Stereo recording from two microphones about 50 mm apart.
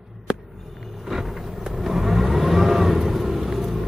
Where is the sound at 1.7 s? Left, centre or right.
Centre.